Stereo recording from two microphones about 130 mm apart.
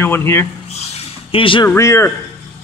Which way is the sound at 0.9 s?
45° left (ahead or behind).